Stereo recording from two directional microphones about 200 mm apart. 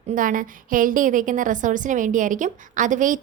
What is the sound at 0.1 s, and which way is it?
A woman's voice, 40° right (ahead or behind).